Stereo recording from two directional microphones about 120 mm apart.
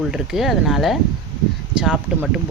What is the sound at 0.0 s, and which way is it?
Speech, centre (ahead or behind).